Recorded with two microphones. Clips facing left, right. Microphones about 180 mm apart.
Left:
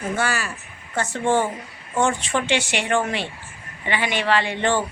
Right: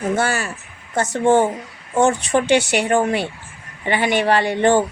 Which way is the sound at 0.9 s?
40° right (ahead or behind).